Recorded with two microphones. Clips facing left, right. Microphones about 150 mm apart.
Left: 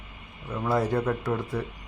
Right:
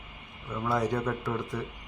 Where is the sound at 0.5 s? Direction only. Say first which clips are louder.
Left 3 dB; 10° left (ahead or behind).